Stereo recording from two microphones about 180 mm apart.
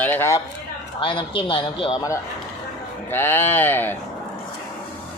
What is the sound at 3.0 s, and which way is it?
Speech, 10° left (ahead or behind).